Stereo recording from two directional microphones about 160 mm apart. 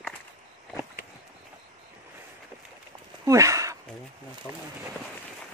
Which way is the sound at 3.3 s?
20° right (ahead or behind).